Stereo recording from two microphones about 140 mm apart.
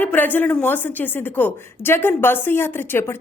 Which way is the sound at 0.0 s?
15° left (ahead or behind).